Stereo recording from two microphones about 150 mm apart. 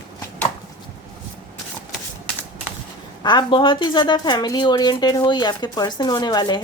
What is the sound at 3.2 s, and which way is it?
Speech, 30° left (ahead or behind).